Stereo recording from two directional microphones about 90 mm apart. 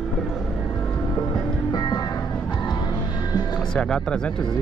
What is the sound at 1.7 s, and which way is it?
Music, 50° left (ahead or behind).